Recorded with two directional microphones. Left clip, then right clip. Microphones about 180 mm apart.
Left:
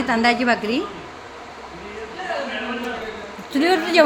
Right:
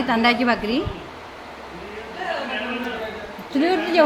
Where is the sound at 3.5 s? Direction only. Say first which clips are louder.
Left 2 dB; 20° left (ahead or behind).